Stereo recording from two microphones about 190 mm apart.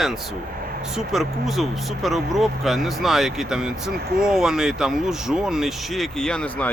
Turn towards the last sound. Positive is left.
turn(degrees=10)  # may be behind; listen again after turning